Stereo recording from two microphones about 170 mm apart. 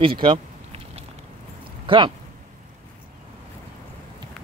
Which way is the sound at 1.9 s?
30° right (ahead or behind).